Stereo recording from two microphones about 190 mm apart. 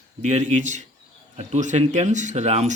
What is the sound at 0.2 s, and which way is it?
Speech, 40° right (ahead or behind).